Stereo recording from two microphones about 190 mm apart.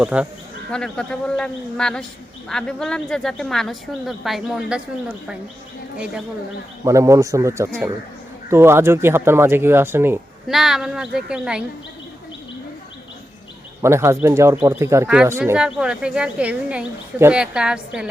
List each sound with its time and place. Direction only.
0.0 s speech: 5° right (ahead or behind)
6.8 s speech: 15° right (ahead or behind)
13.8 s speech: 15° right (ahead or behind)